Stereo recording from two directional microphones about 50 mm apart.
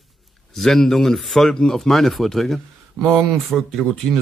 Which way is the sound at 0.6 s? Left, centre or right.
Centre.